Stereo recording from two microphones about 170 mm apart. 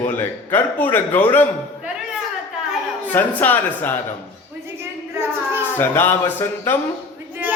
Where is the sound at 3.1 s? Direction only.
10° left (ahead or behind).